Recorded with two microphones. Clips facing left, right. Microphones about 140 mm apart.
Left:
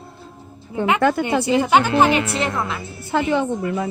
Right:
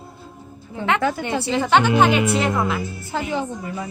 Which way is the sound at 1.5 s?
10° left (ahead or behind).